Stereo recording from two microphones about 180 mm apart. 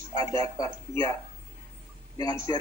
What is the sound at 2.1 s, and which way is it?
Speech, 20° left (ahead or behind).